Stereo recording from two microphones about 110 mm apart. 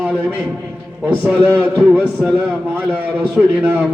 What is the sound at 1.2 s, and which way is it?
A man's voice, 15° right (ahead or behind).